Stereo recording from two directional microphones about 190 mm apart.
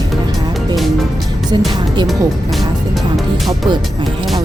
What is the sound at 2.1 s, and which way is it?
Music, centre (ahead or behind).